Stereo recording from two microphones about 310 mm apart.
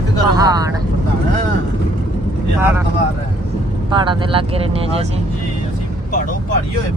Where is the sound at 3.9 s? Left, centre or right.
Centre.